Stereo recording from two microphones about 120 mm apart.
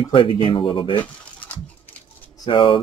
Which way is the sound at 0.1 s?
45° left (ahead or behind).